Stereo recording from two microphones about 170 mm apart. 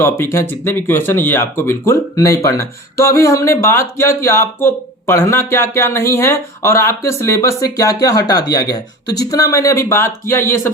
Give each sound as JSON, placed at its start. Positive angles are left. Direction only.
{"t": 0.0, "sound": "speech", "side_deg": 15}